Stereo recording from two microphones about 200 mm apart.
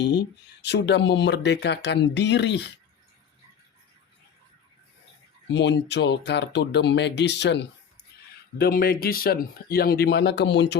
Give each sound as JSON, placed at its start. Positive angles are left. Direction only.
{"t": 0.0, "sound": "speech", "side_deg": 55}
{"t": 5.5, "sound": "speech", "side_deg": 60}
{"t": 8.1, "sound": "a sound", "side_deg": 55}
{"t": 8.5, "sound": "speech", "side_deg": 50}